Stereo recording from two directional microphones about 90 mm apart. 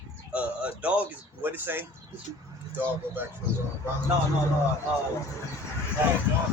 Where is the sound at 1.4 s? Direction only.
25° right (ahead or behind).